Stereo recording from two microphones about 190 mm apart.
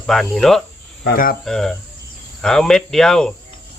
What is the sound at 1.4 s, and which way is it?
Cricket, centre (ahead or behind).